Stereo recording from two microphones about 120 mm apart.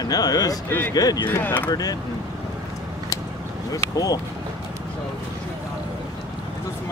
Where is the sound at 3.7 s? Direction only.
30° left (ahead or behind).